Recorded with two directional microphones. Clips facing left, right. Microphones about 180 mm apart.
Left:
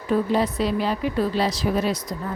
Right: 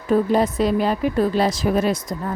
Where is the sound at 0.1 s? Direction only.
45° right (ahead or behind).